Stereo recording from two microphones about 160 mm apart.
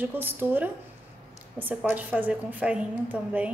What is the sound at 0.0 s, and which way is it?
A woman's voice, 10° right (ahead or behind).